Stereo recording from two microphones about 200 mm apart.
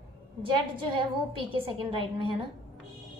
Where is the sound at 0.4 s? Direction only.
25° right (ahead or behind).